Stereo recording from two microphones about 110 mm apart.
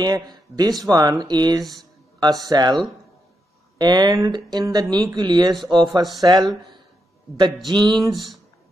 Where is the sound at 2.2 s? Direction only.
35° right (ahead or behind).